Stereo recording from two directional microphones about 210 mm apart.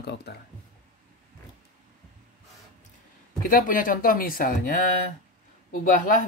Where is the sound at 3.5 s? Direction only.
40° left (ahead or behind).